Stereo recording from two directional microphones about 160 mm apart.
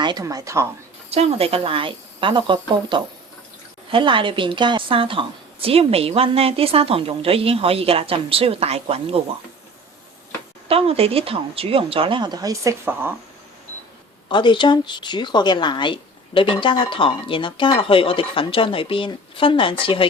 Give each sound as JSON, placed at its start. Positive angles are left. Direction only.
{"t": 0.0, "sound": "speech", "side_deg": -25}
{"t": 1.1, "sound": "a woman's voice", "side_deg": -40}
{"t": 10.7, "sound": "a woman's voice", "side_deg": -40}
{"t": 14.3, "sound": "speech", "side_deg": 30}